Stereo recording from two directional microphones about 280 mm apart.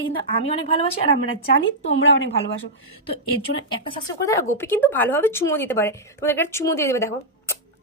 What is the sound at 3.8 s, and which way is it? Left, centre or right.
A woman's voice, centre.